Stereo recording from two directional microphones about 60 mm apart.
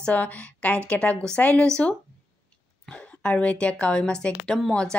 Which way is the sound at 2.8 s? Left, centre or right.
Centre.